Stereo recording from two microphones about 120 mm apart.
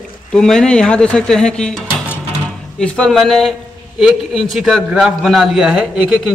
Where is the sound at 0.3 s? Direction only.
5° left (ahead or behind).